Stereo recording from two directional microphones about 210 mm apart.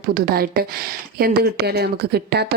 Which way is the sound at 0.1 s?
45° right (ahead or behind).